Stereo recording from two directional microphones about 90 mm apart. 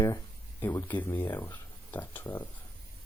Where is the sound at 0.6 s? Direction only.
25° left (ahead or behind).